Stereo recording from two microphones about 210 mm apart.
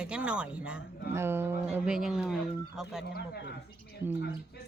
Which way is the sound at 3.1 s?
50° left (ahead or behind).